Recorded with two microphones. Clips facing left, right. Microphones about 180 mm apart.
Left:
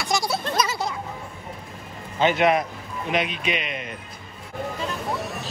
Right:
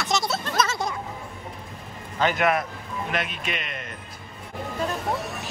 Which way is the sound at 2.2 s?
25° left (ahead or behind).